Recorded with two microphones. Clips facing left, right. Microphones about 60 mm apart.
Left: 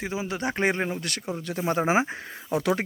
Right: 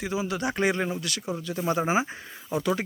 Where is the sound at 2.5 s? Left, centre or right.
Left.